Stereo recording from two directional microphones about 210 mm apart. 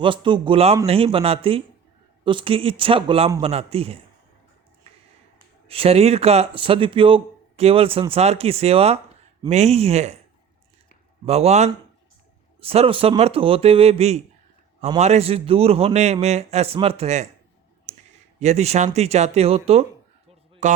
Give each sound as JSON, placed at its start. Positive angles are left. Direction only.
{"t": 0.0, "sound": "speech", "side_deg": -25}
{"t": 5.6, "sound": "speech", "side_deg": -30}
{"t": 11.3, "sound": "speech", "side_deg": -30}
{"t": 18.3, "sound": "a man's voice", "side_deg": -30}